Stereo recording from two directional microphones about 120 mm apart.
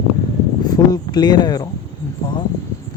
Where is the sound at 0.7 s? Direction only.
35° left (ahead or behind).